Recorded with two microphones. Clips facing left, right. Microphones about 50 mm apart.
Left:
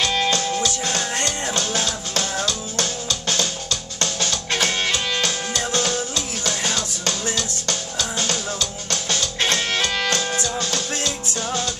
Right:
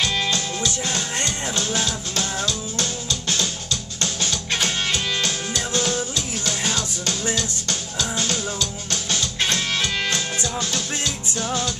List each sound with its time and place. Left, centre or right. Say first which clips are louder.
0.0 s music: left 2 dB; centre
2.4 s music: left 1 dB; left
5.7 s music: even; left
9.5 s music: left 3 dB; left
10.1 s music: left 2 dB; centre